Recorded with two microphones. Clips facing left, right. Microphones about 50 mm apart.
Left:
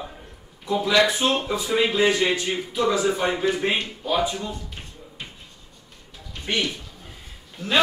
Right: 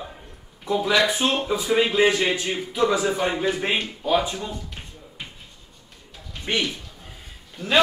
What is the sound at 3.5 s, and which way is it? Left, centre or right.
Speech, centre.